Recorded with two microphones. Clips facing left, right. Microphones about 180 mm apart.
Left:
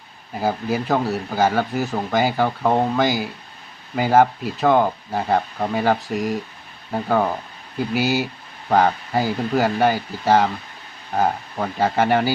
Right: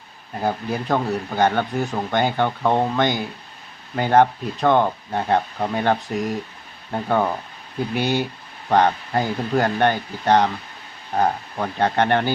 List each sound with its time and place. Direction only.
0.3 s speech: 5° left (ahead or behind)